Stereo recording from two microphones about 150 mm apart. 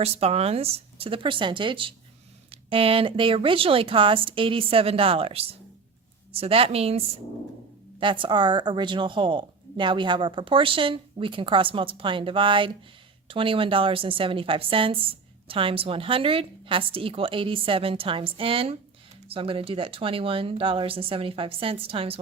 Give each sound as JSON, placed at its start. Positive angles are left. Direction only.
{"t": 0.0, "sound": "a woman's voice", "side_deg": -45}